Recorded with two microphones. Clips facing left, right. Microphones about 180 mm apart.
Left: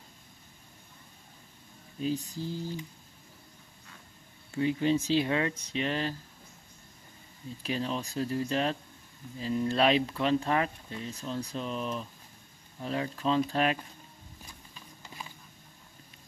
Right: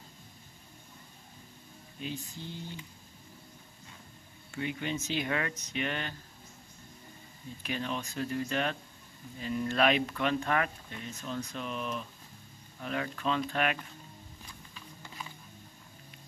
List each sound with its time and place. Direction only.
2.0 s speech: 40° left (ahead or behind)
4.5 s speech: 35° left (ahead or behind)
7.6 s speech: 30° left (ahead or behind)